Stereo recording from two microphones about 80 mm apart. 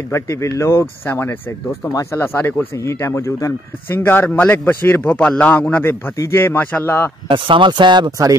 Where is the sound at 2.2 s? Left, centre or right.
Left.